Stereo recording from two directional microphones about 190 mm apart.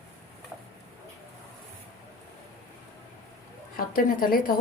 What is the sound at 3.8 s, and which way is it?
Speech, 50° left (ahead or behind).